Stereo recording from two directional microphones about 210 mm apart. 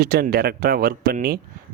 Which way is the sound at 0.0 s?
45° right (ahead or behind).